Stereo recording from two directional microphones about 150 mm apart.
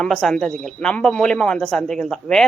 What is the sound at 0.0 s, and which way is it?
Speech, centre (ahead or behind).